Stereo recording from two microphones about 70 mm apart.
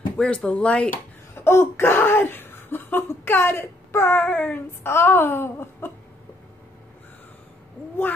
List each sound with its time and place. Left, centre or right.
0.2 s speech: centre
1.4 s speech: left
4.8 s speech: left